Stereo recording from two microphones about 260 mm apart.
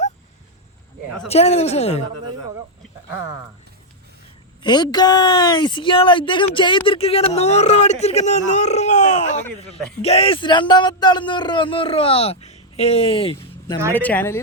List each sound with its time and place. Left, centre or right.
1.3 s speech: left
4.6 s speech: centre
13.9 s speech: centre